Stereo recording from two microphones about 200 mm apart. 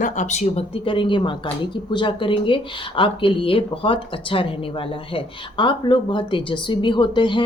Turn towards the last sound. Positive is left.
turn(degrees=25)  # may be behind; listen again after turning